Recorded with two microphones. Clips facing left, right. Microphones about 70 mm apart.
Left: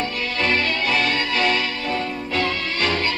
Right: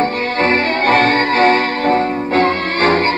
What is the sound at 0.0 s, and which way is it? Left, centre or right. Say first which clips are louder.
Music: right 8 dB; right.